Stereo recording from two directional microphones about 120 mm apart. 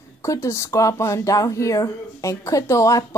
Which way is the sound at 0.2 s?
25° left (ahead or behind).